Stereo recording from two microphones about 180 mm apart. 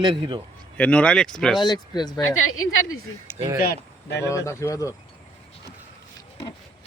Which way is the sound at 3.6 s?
60° left (ahead or behind).